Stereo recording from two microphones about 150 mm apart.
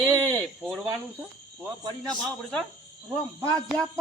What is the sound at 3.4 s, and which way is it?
Speech, 25° right (ahead or behind).